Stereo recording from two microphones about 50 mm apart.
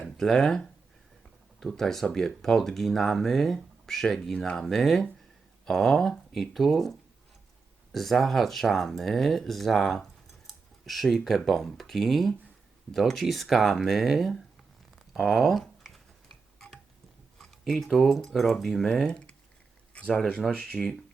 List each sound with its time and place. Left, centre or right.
0.2 s speech: centre
7.9 s speech: centre
15.8 s a sound: centre
16.6 s tick-tock: centre
17.3 s speech: centre
19.0 s a sound: centre
20.5 s speech: centre